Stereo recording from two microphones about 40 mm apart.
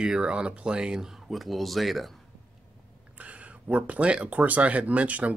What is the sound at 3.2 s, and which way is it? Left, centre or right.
Speech, right.